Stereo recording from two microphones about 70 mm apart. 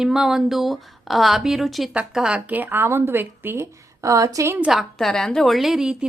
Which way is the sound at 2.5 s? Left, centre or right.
Right.